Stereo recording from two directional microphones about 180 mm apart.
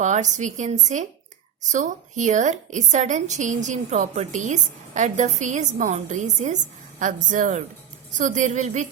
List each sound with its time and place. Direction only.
0.0 s a woman's voice: 40° right (ahead or behind)